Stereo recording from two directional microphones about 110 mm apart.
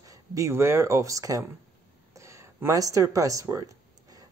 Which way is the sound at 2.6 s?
30° right (ahead or behind).